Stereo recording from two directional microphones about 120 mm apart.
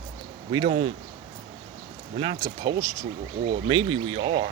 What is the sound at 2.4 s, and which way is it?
Speech, 30° right (ahead or behind).